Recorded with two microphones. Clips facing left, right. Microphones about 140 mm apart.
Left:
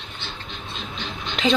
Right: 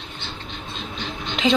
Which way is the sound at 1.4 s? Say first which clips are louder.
Right 1 dB; 20° right (ahead or behind).